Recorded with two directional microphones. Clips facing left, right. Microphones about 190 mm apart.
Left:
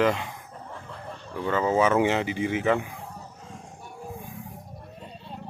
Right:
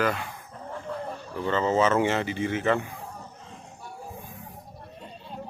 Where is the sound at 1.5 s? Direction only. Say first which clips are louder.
Left 1 dB; 10° left (ahead or behind).